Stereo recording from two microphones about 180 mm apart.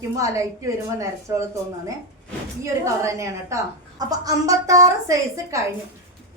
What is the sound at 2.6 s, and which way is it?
A woman's voice, 15° right (ahead or behind).